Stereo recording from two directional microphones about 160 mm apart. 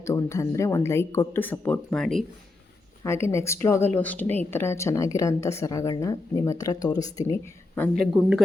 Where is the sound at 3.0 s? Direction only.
15° left (ahead or behind).